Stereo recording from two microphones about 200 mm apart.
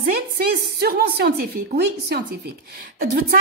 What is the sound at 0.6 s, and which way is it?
A woman's voice, 50° right (ahead or behind).